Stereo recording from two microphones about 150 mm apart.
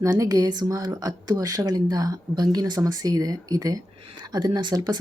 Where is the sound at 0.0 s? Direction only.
25° right (ahead or behind).